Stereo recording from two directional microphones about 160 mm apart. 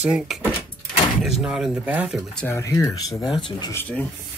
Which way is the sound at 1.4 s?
5° right (ahead or behind).